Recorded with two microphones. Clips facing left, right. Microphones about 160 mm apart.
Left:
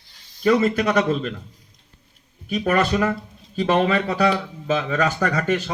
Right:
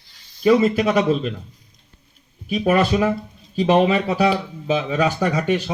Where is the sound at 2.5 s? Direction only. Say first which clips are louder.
Right 2 dB; 10° right (ahead or behind).